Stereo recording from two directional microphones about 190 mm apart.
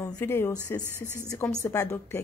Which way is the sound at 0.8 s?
10° right (ahead or behind).